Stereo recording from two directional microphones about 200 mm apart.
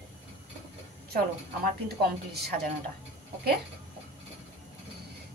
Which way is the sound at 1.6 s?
55° right (ahead or behind).